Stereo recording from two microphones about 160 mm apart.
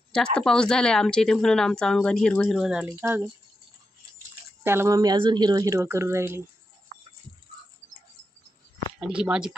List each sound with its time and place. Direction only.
0.1 s speech: 5° left (ahead or behind); by 3.3 s 10° right (ahead or behind)
4.6 s speech: 15° right (ahead or behind)
9.0 s speech: 5° right (ahead or behind)